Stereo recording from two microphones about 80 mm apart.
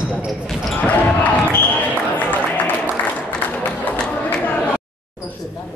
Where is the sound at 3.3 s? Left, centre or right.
Centre.